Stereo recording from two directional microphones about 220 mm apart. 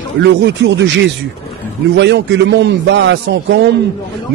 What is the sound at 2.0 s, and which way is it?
A man's voice, 50° right (ahead or behind).